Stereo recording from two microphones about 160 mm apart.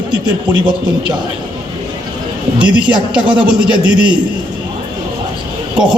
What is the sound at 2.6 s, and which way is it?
Speech, 30° right (ahead or behind).